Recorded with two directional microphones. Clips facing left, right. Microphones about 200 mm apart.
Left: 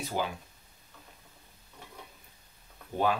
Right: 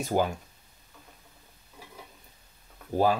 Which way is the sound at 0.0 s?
45° right (ahead or behind).